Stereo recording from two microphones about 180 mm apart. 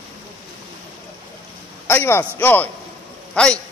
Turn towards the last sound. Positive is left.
turn(degrees=5)  # may be behind; listen again after turning